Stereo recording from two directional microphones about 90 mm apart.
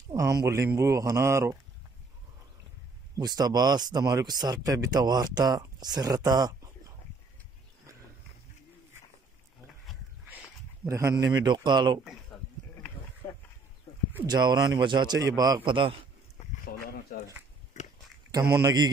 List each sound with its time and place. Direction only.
0.1 s speech: 35° right (ahead or behind)
3.2 s speech: 45° right (ahead or behind)
10.9 s speech: 35° right (ahead or behind)
11.3 s speech: 55° right (ahead or behind)
13.2 s a sound: 20° left (ahead or behind)
14.2 s speech: 50° right (ahead or behind)
15.6 s speech: 70° right (ahead or behind)